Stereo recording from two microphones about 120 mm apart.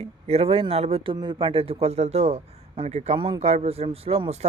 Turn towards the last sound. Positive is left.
turn(degrees=-60)  # may be behind; listen again after turning